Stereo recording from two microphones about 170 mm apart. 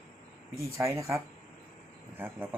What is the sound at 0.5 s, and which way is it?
Speech, 20° right (ahead or behind).